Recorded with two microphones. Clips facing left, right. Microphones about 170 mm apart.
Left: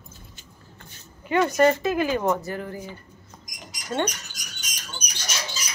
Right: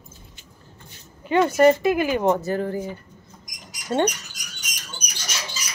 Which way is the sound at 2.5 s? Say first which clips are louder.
Right 7 dB; 30° right (ahead or behind).